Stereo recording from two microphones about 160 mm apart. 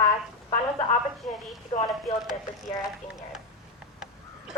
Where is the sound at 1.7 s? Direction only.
35° left (ahead or behind).